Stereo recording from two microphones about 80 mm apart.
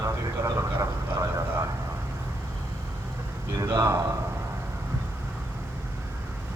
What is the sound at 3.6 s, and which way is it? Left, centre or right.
Speech, right.